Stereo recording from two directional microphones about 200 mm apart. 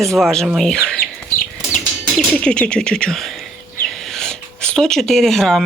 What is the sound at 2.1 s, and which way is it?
Speech, 5° left (ahead or behind).